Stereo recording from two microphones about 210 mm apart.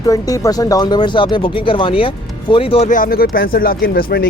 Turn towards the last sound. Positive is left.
turn(degrees=45)  # may be behind; listen again after turning